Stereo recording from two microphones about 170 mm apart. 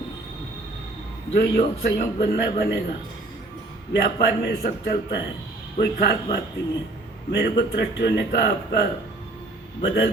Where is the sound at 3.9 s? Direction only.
80° left.